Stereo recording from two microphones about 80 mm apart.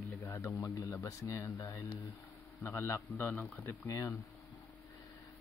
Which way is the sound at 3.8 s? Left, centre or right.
Left.